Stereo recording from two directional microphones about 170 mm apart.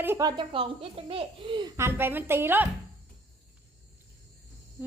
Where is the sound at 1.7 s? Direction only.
15° right (ahead or behind).